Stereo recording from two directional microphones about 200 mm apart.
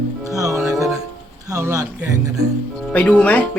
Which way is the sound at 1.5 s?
15° right (ahead or behind).